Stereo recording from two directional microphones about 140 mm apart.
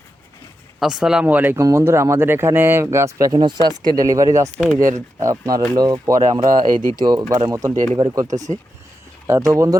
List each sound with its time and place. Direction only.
0.8 s speech: 5° right (ahead or behind); by 6.5 s 25° right (ahead or behind)
6.7 s speech: 70° right (ahead or behind)
7.0 s speech: 25° right (ahead or behind)